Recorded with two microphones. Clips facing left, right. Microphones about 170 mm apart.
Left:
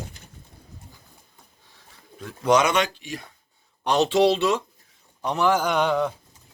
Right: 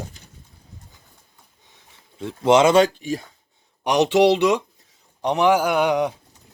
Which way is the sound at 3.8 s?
15° right (ahead or behind).